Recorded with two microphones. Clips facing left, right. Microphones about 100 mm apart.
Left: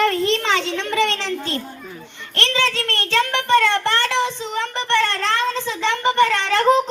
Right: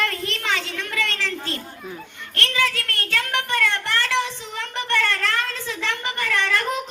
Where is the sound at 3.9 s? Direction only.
20° left (ahead or behind).